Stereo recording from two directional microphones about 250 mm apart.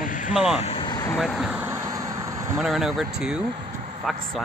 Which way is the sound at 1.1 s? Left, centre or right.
Centre.